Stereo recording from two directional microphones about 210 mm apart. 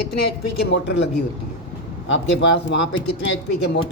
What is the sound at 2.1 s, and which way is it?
Speech, 60° left (ahead or behind).